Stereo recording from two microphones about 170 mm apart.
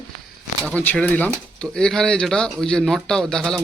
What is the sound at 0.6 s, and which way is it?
Speech, 10° left (ahead or behind).